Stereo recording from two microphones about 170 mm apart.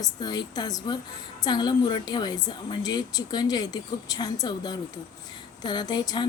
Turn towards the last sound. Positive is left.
turn(degrees=25)  # may be behind; listen again after turning